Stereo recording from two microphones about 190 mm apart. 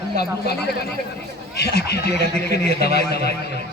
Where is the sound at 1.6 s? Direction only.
60° left (ahead or behind).